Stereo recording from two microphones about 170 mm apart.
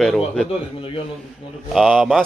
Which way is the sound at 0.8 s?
35° left (ahead or behind).